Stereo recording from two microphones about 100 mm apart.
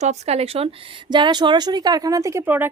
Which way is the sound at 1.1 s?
50° right (ahead or behind).